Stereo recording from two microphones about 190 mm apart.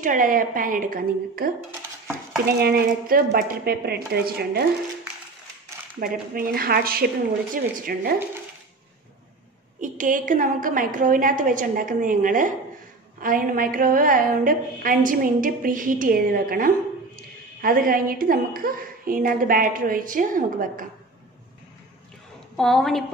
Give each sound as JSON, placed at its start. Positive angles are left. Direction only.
{"t": 0.0, "sound": "a woman's voice", "side_deg": -45}
{"t": 6.3, "sound": "a woman's voice", "side_deg": -50}
{"t": 9.8, "sound": "a woman's voice", "side_deg": -45}
{"t": 22.6, "sound": "a woman's voice", "side_deg": 0}